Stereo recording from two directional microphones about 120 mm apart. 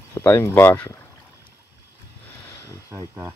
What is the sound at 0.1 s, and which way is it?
Speech, 20° left (ahead or behind).